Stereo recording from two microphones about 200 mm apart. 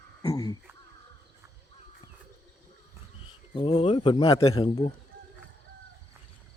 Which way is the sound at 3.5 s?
25° left (ahead or behind).